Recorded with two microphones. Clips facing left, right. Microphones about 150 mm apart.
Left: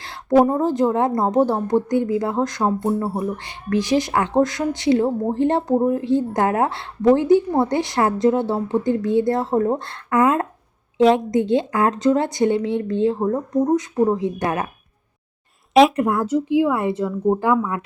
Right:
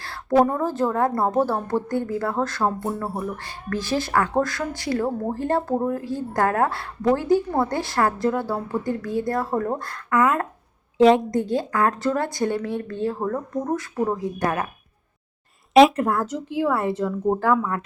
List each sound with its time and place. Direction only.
0.0 s a sound: 20° left (ahead or behind)
0.4 s a woman's voice: 20° left (ahead or behind)
10.9 s a woman's voice: centre (ahead or behind)
11.3 s speech: 20° left (ahead or behind)
15.7 s speech: centre (ahead or behind)
16.1 s a woman's voice: 10° left (ahead or behind)